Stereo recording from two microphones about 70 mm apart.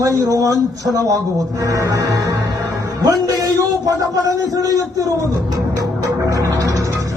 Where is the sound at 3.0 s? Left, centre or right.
Right.